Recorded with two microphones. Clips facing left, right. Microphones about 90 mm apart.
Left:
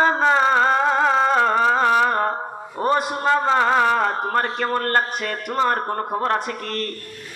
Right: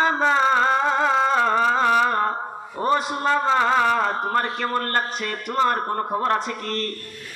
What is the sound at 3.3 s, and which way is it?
A man's voice, 35° left (ahead or behind).